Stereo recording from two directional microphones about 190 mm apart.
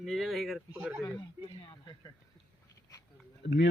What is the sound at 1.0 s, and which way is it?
Speech, 25° left (ahead or behind).